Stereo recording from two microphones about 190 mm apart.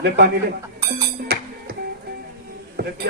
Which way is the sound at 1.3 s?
55° right (ahead or behind).